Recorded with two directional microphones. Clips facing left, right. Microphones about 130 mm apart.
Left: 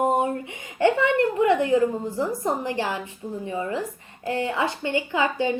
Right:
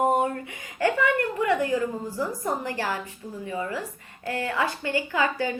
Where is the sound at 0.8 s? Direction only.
25° left (ahead or behind).